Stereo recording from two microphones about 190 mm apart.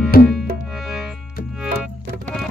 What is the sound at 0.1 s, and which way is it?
Music, 50° left (ahead or behind).